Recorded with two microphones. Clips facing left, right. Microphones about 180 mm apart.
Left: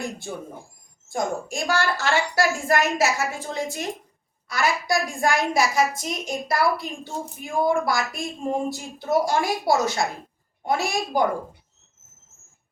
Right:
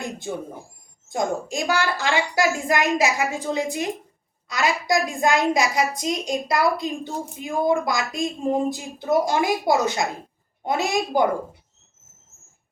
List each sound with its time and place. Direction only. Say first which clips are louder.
1.1 s a woman's voice: right 2 dB; 20° right (ahead or behind)